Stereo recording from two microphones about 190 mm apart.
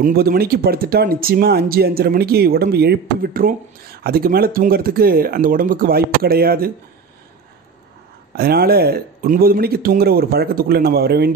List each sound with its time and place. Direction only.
0.0 s speech: 50° right (ahead or behind)
8.4 s speech: 55° right (ahead or behind)